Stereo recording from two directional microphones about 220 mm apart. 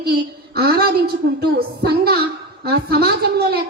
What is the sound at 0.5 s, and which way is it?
A woman's voice, 45° right (ahead or behind).